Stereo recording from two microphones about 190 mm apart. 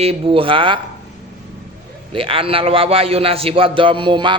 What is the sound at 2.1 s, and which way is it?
A man's voice, 30° right (ahead or behind).